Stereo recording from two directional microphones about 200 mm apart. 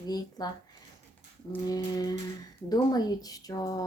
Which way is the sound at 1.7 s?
20° left (ahead or behind).